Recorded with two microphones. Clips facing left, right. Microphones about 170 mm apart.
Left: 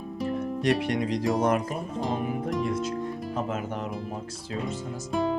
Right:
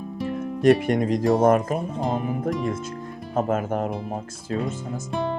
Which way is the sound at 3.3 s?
50° right (ahead or behind).